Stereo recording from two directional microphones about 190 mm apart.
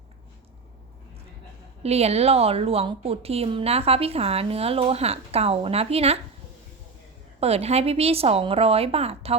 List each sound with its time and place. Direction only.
1.8 s a woman's voice: 35° right (ahead or behind)
7.3 s a woman's voice: 35° right (ahead or behind)